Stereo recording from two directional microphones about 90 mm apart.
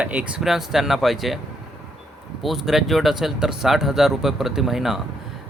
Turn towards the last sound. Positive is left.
turn(degrees=-5)  # may be behind; listen again after turning